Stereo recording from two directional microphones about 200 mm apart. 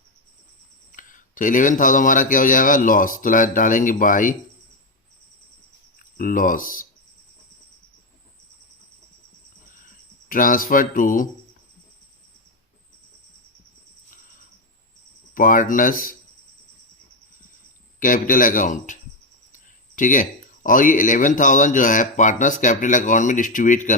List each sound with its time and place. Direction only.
0.9 s speech: 40° left (ahead or behind)
6.0 s speech: 45° left (ahead or behind)
10.2 s speech: 40° left (ahead or behind)
15.4 s speech: 45° left (ahead or behind)
18.0 s speech: 45° left (ahead or behind)